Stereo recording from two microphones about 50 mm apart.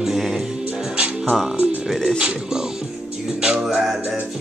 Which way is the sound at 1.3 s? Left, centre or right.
Centre.